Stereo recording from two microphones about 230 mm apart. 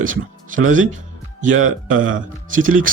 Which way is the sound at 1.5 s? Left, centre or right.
Right.